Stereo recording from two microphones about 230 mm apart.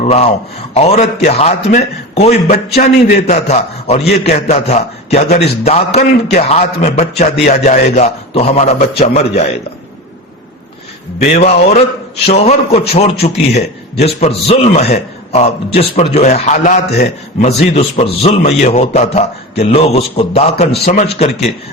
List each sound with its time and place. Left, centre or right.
0.0 s a man's voice: left
11.2 s a man's voice: left